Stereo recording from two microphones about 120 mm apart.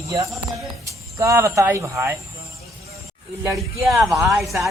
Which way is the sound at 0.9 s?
25° right (ahead or behind).